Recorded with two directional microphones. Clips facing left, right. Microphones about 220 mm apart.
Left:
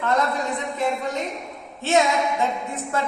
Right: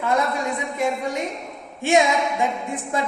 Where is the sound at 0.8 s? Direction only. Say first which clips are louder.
Right 1 dB; 10° right (ahead or behind).